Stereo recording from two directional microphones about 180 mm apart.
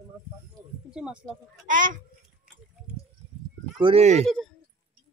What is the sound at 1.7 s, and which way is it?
Speech, 45° right (ahead or behind).